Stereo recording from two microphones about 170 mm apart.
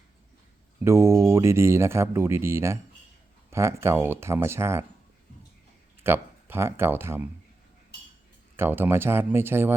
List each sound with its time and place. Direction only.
0.9 s speech: 15° right (ahead or behind)
6.0 s speech: 15° right (ahead or behind)
8.5 s speech: 15° right (ahead or behind)